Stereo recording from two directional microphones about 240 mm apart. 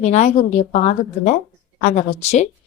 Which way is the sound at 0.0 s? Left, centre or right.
Left.